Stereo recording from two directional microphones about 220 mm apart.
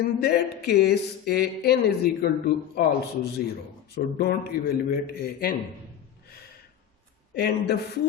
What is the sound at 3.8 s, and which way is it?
Speech, 45° left (ahead or behind).